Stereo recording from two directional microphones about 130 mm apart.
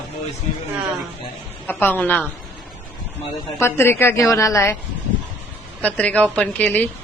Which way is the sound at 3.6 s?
20° left (ahead or behind).